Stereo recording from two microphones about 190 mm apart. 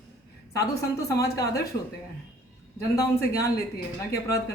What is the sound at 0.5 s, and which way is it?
Speech, 15° left (ahead or behind).